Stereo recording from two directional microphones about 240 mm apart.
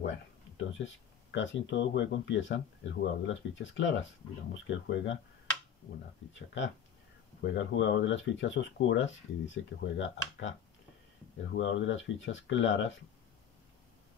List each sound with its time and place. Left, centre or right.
0.6 s speech: left
6.3 s speech: left
11.5 s speech: left